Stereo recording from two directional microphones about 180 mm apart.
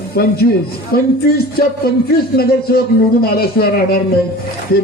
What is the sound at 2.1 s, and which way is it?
A man's voice, 60° left (ahead or behind).